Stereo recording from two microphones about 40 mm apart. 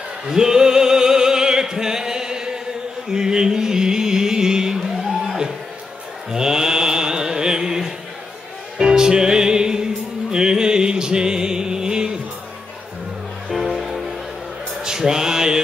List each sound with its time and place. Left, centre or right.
0.3 s music: centre
13.5 s music: centre
14.8 s mantra: centre